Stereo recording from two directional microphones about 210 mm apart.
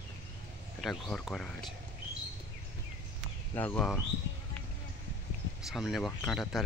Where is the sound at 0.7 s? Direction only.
Centre (ahead or behind).